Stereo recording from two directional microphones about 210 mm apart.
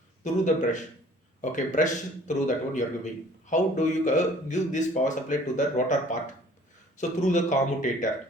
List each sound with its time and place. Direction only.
0.4 s a man's voice: 35° left (ahead or behind)